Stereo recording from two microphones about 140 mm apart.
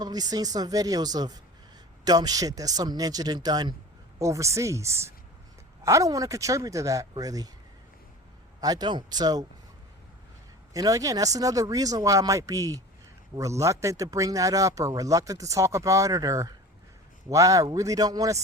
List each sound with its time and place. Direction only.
0.0 s speech: 30° right (ahead or behind)
8.6 s speech: 30° right (ahead or behind)
10.8 s speech: 25° right (ahead or behind)